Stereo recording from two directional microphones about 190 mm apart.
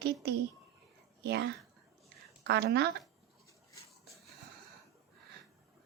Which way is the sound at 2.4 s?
60° right (ahead or behind).